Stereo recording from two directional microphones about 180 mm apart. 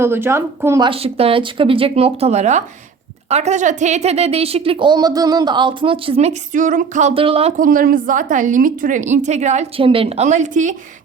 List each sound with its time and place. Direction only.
0.0 s speech: 15° right (ahead or behind)
0.9 s a woman's voice: 30° right (ahead or behind)
7.6 s a woman's voice: 50° right (ahead or behind)